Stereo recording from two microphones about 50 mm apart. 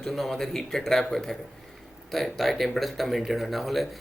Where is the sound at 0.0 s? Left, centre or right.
Centre.